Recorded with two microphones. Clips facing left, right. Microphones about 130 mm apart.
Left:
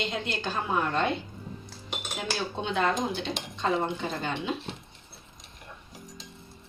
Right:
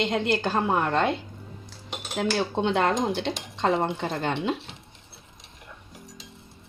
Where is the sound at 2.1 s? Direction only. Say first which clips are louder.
Right 8 dB; 75° right (ahead or behind).